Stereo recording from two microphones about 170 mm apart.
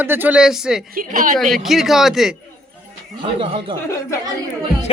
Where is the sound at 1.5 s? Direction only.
Centre (ahead or behind).